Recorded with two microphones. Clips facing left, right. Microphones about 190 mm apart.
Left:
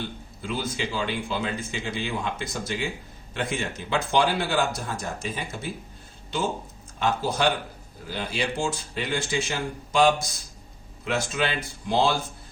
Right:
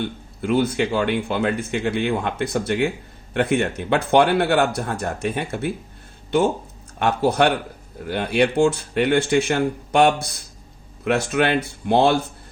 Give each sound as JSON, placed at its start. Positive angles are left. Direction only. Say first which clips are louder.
{"t": 0.0, "sound": "a man's voice", "louder": "right 8 dB", "side_deg": -60}
{"t": 7.0, "sound": "a man's voice", "louder": "right 6 dB", "side_deg": -65}